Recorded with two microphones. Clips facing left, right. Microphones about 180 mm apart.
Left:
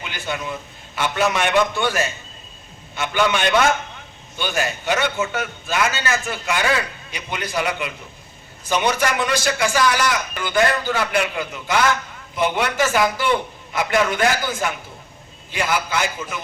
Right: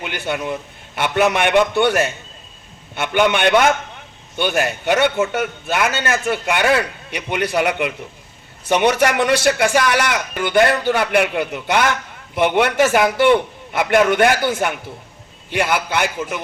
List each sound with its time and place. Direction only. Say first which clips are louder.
0.0 s a man's voice: right 5 dB; 60° right (ahead or behind)